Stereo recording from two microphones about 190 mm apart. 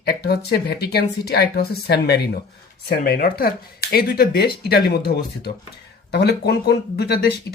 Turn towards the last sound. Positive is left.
turn(degrees=55)  # may be behind; listen again after turning